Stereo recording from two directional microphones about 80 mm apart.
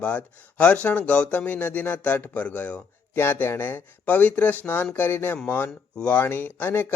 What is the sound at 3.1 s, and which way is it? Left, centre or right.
Speech, left.